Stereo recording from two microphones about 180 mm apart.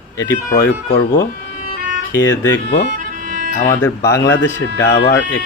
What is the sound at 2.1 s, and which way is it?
Speech, 15° left (ahead or behind).